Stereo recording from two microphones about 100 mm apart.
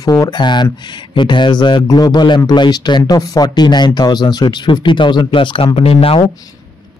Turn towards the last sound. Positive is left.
turn(degrees=70)  # may be behind; listen again after turning